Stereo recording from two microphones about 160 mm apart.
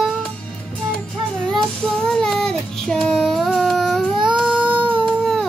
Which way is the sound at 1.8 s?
5° left (ahead or behind).